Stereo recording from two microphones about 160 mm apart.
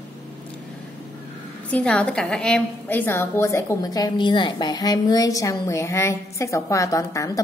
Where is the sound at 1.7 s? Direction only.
5° left (ahead or behind).